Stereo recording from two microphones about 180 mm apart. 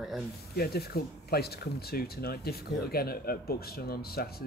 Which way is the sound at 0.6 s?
60° left (ahead or behind).